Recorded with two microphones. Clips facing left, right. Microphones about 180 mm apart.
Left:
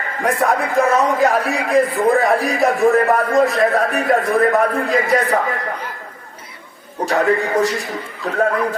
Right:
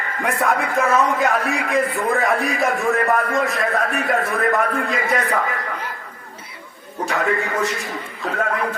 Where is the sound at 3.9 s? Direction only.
35° left (ahead or behind).